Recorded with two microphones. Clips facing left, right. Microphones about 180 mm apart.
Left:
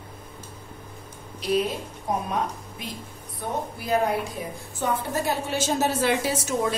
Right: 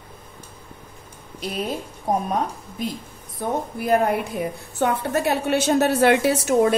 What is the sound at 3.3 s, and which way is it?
A woman's voice, 55° right (ahead or behind).